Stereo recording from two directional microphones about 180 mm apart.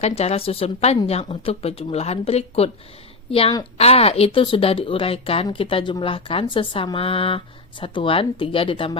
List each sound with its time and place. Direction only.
0.0 s speech: 35° left (ahead or behind)